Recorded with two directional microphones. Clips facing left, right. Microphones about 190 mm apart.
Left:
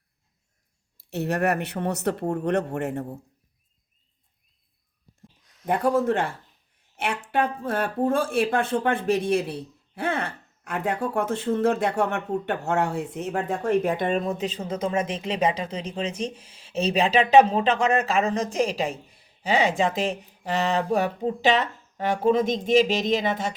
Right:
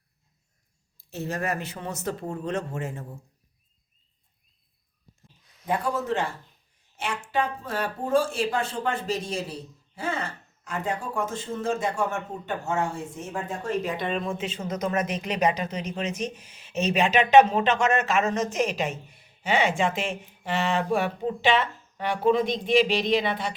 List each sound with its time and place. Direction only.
0.9 s speech: 65° left (ahead or behind)
5.6 s speech: 55° left (ahead or behind)